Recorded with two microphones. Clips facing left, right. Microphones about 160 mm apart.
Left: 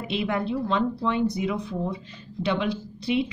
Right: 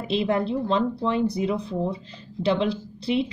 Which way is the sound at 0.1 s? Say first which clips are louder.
Right 3 dB; 30° right (ahead or behind).